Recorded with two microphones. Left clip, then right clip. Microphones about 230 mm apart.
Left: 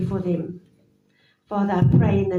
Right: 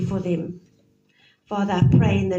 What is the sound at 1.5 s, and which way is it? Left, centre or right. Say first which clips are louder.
Speech: even; right.